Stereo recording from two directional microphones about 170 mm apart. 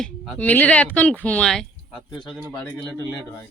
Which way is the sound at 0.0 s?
5° left (ahead or behind).